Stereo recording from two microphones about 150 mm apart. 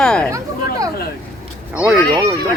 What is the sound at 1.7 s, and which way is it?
Speech, 5° right (ahead or behind).